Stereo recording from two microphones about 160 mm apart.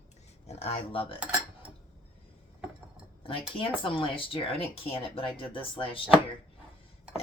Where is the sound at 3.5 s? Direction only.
35° left (ahead or behind).